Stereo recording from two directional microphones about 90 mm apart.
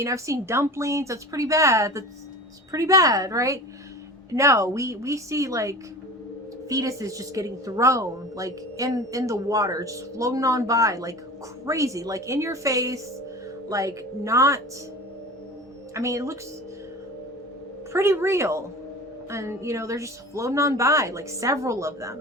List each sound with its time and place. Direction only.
0.0 s a woman's voice: 35° right (ahead or behind)
16.0 s a woman's voice: 35° right (ahead or behind)
17.9 s a woman's voice: 30° right (ahead or behind)